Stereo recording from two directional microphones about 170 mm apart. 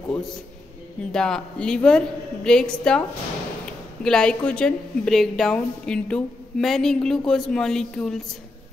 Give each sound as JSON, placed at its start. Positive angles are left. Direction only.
{"t": 1.1, "sound": "a woman's voice", "side_deg": 5}
{"t": 4.0, "sound": "a woman's voice", "side_deg": 5}